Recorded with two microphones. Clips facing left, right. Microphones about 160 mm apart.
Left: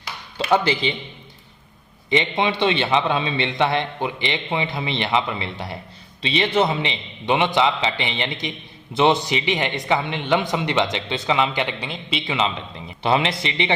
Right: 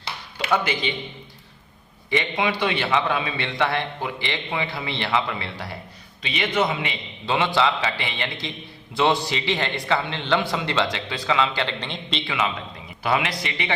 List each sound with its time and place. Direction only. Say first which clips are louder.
0.3 s speech: left 4 dB; 30° left (ahead or behind)
2.0 s a man's voice: left 3 dB; 25° left (ahead or behind)